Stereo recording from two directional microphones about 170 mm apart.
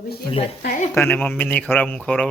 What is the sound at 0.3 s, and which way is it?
Speech, 35° left (ahead or behind).